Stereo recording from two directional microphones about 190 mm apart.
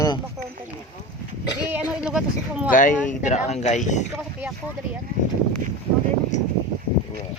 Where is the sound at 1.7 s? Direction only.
5° right (ahead or behind).